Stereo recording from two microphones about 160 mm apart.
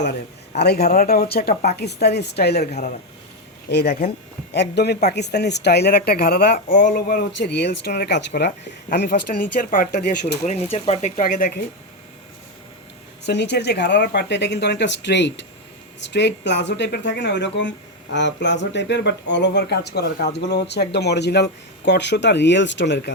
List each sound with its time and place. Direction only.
0.6 s speech: 90° left
0.9 s speech: 65° left (ahead or behind)
1.3 s speech: 80° left
2.6 s speech: 45° left (ahead or behind)
3.7 s speech: 90° left; by 10.2 s 60° left (ahead or behind)
10.4 s speech: 40° left (ahead or behind)
11.2 s speech: 60° left (ahead or behind)
13.2 s speech: 90° left